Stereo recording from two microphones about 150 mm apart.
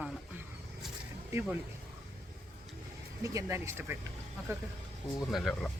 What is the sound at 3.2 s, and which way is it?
Speech, 20° right (ahead or behind).